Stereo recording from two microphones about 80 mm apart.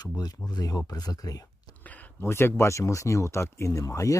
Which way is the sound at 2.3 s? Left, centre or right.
Left.